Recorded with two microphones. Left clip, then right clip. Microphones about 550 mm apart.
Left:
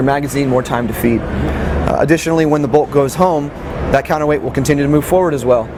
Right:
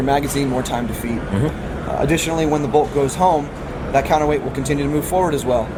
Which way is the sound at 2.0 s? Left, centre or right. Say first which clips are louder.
Left 5 dB; left.